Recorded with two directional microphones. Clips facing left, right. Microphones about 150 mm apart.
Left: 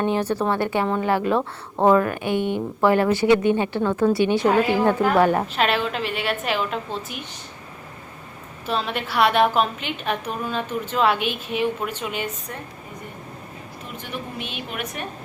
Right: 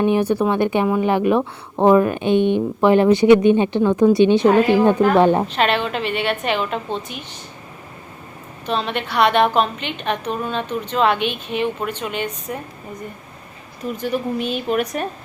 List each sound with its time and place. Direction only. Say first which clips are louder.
0.0 s speech: right 5 dB; 15° right (ahead or behind)
5.5 s a woman's voice: right 3 dB; 5° left (ahead or behind)
8.6 s a woman's voice: right 3 dB; 5° left (ahead or behind)
13.9 s a woman's voice: right 10 dB; 40° right (ahead or behind)